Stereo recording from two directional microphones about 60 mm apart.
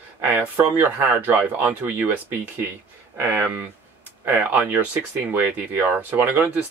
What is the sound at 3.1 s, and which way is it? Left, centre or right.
Speech, right.